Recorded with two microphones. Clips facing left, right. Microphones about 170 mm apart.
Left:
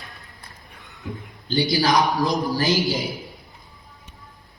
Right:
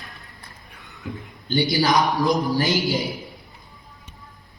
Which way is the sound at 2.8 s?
Centre (ahead or behind).